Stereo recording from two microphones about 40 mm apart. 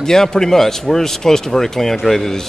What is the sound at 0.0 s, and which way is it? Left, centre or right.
A man's voice, centre.